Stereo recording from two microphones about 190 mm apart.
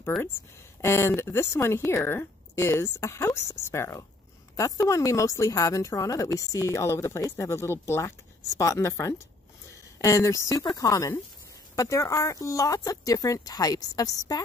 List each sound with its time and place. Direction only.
0.0 s speech: 10° left (ahead or behind)